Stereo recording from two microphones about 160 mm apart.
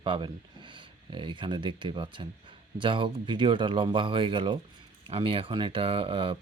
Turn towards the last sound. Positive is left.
turn(degrees=-35)  # may be behind; listen again after turning